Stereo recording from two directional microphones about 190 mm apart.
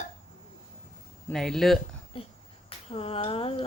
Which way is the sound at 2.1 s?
30° left (ahead or behind).